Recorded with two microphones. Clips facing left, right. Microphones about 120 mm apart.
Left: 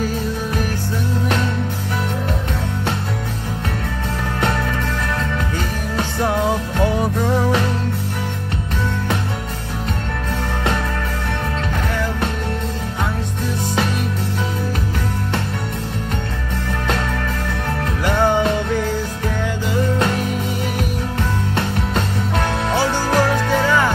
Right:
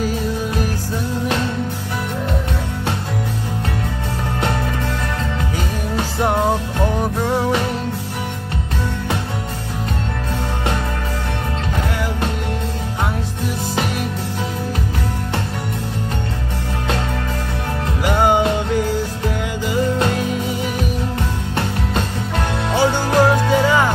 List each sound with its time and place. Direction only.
18.0 s music: 15° right (ahead or behind)
22.8 s music: 15° right (ahead or behind)